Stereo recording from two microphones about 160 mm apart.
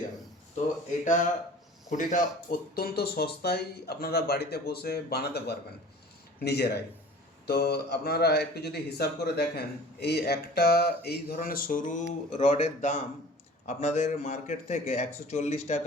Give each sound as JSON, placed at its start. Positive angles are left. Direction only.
{"t": 1.0, "sound": "a man's voice", "side_deg": 55}
{"t": 7.4, "sound": "a man's voice", "side_deg": 80}